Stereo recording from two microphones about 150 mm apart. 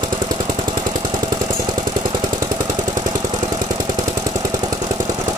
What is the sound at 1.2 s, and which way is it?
Vehicle, 30° right (ahead or behind).